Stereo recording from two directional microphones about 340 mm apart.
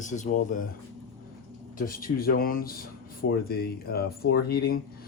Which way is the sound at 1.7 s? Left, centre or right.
Left.